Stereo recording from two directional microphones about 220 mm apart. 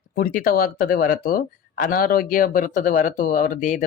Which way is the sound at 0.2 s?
40° left (ahead or behind).